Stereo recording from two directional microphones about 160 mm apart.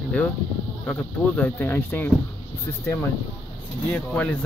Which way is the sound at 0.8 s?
10° left (ahead or behind).